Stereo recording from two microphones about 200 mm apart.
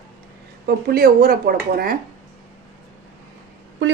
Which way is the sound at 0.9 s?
50° right (ahead or behind).